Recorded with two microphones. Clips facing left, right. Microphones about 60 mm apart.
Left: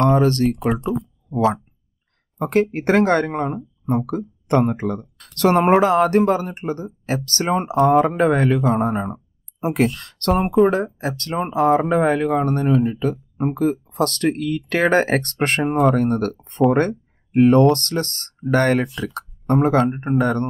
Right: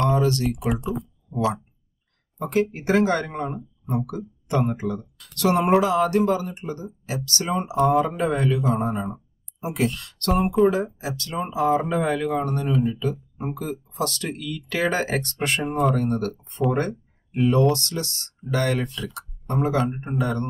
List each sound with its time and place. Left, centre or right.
0.0 s speech: left
2.3 s speech: left